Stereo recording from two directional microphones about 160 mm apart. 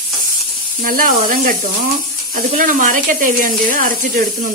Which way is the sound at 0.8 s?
60° right (ahead or behind).